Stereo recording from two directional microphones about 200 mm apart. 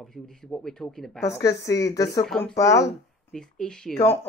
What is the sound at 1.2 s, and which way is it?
Speech, 15° left (ahead or behind).